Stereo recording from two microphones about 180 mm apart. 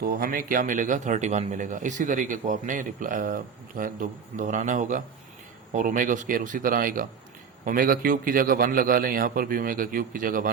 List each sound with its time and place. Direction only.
0.0 s a man's voice: 55° right (ahead or behind)